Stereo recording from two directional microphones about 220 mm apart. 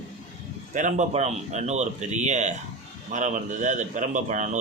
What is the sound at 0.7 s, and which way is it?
A man's voice, 35° right (ahead or behind).